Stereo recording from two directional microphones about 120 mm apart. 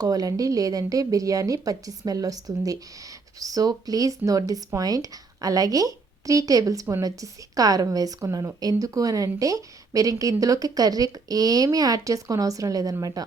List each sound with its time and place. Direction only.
0.0 s speech: 30° right (ahead or behind)